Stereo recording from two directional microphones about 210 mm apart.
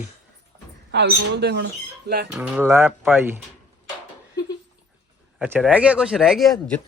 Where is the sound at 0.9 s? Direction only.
55° right (ahead or behind).